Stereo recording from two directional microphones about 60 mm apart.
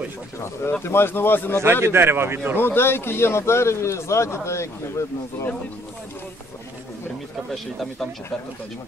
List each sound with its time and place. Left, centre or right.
0.8 s speech: left
1.6 s a man's voice: right
2.6 s a man's voice: left
7.5 s speech: centre